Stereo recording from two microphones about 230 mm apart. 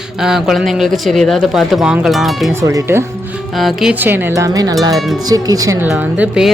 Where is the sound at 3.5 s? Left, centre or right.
Centre.